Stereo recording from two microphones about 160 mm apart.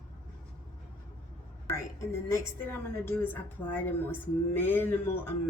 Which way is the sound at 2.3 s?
15° left (ahead or behind).